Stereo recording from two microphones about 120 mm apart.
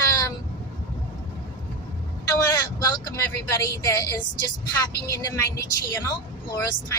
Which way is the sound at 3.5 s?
25° left (ahead or behind).